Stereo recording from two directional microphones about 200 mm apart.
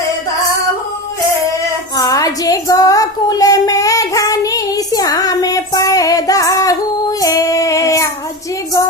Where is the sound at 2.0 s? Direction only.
15° left (ahead or behind).